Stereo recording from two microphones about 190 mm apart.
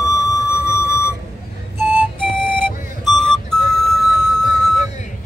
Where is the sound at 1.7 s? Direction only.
10° right (ahead or behind).